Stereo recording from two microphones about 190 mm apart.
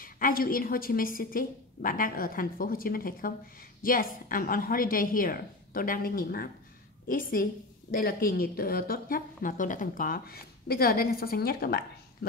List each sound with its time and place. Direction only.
0.0 s a woman's voice: 50° left (ahead or behind)